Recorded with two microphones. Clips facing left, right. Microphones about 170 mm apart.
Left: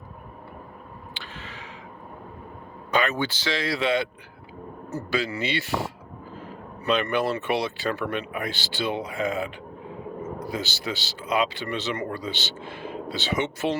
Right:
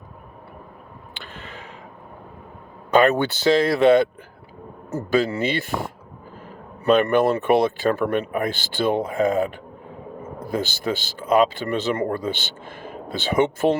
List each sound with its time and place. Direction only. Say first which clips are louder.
2.9 s speech: right 8 dB; 55° right (ahead or behind)
10.5 s speech: right 10 dB; 50° right (ahead or behind)